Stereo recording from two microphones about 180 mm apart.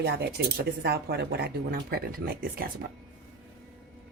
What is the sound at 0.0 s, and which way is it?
Speech, 65° right (ahead or behind).